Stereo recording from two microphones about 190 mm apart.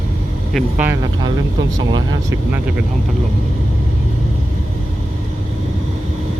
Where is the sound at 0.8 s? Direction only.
15° right (ahead or behind).